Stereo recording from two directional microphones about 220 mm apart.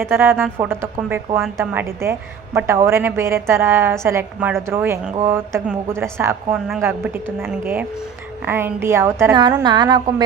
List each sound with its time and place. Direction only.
0.0 s a woman's voice: 10° right (ahead or behind)